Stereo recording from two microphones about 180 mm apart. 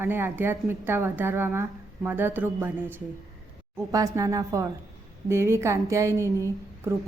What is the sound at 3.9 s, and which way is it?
A woman's voice, 20° right (ahead or behind).